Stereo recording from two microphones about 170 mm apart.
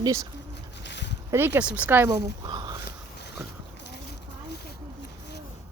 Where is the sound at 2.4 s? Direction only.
25° right (ahead or behind).